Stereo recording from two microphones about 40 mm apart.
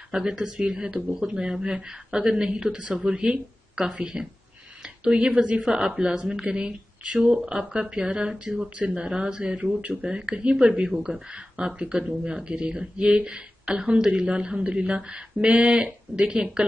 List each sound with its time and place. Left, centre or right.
0.1 s speech: centre; by 5.7 s right
5.7 s speech: centre
13.9 s speech: centre
14.2 s speech: right